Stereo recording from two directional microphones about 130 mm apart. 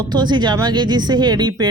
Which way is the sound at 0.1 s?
35° right (ahead or behind).